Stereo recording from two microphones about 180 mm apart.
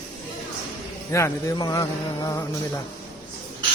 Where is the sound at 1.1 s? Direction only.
15° left (ahead or behind).